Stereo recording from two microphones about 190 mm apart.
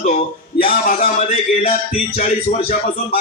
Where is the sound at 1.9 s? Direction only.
35° left (ahead or behind).